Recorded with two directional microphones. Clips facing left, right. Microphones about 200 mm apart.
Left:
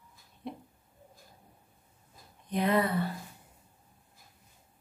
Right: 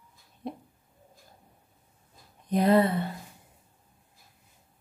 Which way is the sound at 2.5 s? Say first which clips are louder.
Right 6 dB; 40° right (ahead or behind).